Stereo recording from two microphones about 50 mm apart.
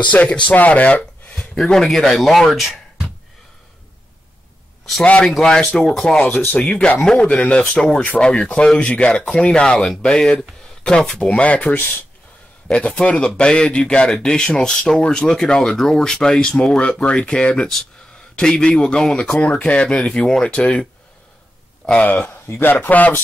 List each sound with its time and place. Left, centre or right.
0.1 s speech: left
1.3 s a sound: centre
1.6 s speech: centre
5.4 s speech: centre
6.4 s speech: left
12.6 s speech: left
22.0 s speech: left